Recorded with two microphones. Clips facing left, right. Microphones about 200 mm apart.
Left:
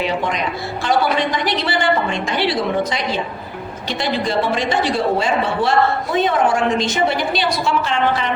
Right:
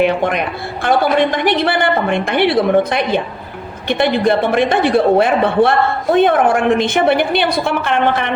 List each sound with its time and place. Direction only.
0.0 s a man's voice: 55° right (ahead or behind)